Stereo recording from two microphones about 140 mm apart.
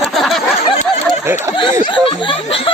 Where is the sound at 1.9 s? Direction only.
35° left (ahead or behind).